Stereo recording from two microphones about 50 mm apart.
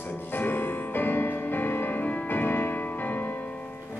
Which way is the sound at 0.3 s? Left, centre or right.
Left.